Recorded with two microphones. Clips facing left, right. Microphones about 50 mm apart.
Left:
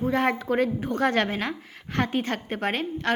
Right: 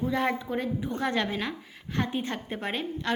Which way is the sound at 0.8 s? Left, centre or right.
Left.